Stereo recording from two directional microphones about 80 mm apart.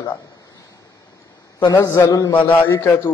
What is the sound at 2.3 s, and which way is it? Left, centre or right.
Speech, left.